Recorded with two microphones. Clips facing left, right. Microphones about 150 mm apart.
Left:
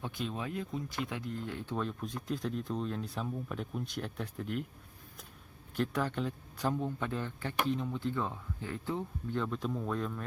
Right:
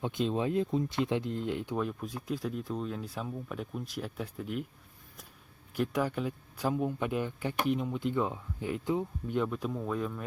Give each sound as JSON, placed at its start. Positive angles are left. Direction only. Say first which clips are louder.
{"t": 0.0, "sound": "speech", "louder": "right 7 dB", "side_deg": -25}
{"t": 5.7, "sound": "speech", "louder": "right 2 dB", "side_deg": -10}